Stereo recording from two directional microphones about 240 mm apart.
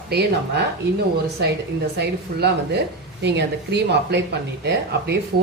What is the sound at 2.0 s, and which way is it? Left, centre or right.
A woman's voice, right.